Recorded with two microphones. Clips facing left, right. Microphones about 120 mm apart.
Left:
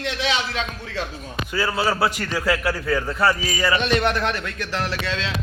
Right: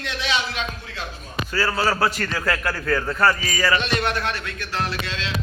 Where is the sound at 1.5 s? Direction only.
15° left (ahead or behind).